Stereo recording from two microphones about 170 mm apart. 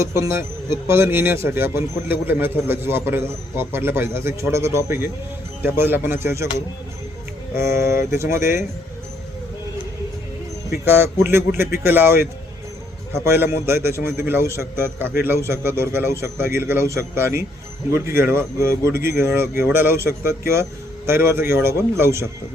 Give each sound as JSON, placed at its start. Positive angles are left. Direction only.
{"t": 0.0, "sound": "speech", "side_deg": -15}
{"t": 7.5, "sound": "speech", "side_deg": -15}
{"t": 10.8, "sound": "speech", "side_deg": -15}
{"t": 21.1, "sound": "speech", "side_deg": -15}